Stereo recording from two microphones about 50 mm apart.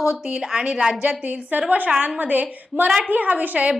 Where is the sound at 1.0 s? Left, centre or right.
Right.